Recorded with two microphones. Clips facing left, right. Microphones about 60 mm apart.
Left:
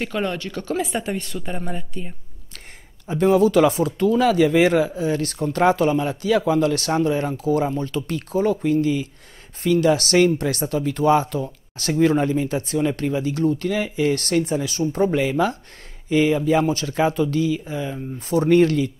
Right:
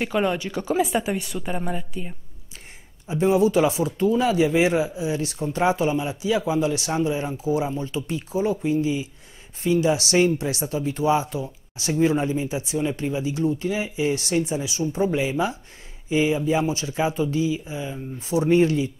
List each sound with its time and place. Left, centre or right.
0.0 s speech: centre
3.1 s speech: left